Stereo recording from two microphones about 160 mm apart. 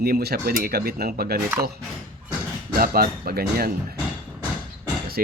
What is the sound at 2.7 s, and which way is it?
Speech, 70° right (ahead or behind).